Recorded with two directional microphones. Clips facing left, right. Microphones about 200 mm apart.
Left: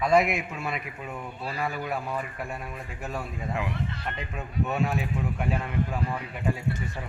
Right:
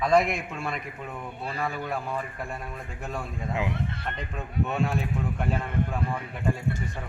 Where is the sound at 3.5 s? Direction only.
20° right (ahead or behind).